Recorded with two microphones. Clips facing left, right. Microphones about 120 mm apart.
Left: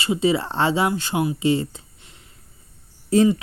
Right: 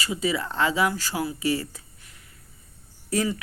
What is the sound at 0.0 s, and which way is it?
Speech, 25° left (ahead or behind).